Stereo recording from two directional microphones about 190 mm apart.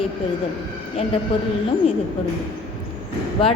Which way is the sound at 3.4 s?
25° left (ahead or behind).